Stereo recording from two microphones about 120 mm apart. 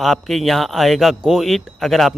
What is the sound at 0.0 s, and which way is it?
Speech, centre (ahead or behind).